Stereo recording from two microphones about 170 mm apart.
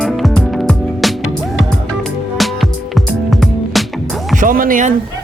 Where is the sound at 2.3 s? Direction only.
Centre (ahead or behind).